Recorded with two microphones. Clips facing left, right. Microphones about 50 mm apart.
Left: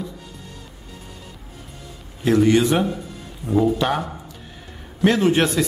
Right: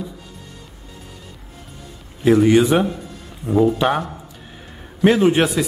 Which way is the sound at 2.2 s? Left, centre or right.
Centre.